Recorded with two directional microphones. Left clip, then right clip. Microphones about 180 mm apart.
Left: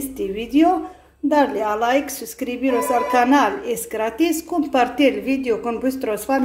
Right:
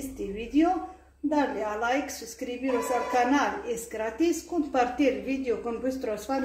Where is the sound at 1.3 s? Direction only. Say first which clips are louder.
Left 10 dB; 60° left (ahead or behind).